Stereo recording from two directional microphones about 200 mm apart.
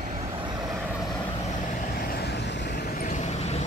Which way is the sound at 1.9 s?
50° left (ahead or behind).